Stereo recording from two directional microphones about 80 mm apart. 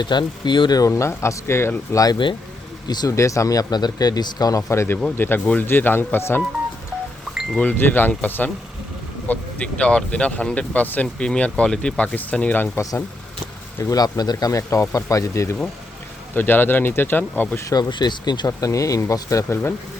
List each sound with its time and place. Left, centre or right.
0.0 s speech: left
0.8 s speech: left
2.8 s speech: left
3.2 s speech: left
4.7 s speech: left
7.6 s speech: left
12.7 s speech: left
13.9 s speech: left
16.3 s speech: left
17.7 s speech: left
18.4 s speech: left